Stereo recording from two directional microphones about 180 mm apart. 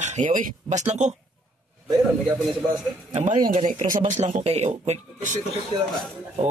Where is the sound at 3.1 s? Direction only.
40° right (ahead or behind).